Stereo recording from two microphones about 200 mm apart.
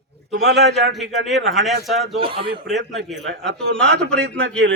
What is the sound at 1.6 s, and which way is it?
Speech, centre (ahead or behind).